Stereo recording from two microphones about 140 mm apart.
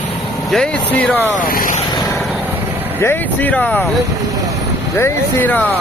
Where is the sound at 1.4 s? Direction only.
85° left.